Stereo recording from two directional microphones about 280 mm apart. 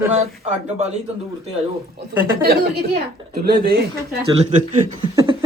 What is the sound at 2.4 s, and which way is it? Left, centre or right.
Speech, right.